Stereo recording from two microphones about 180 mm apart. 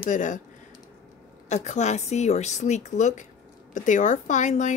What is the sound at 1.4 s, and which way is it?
Speech, 40° left (ahead or behind).